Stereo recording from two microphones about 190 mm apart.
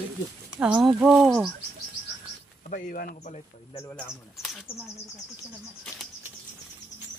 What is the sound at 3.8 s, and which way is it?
Speech, 10° left (ahead or behind).